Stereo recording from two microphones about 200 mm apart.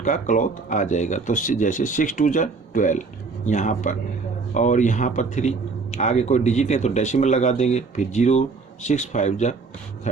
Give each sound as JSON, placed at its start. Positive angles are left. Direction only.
{"t": 0.0, "sound": "speech", "side_deg": 40}